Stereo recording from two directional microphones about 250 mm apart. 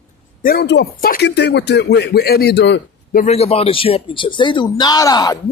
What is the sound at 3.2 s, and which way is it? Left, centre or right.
Speech, left.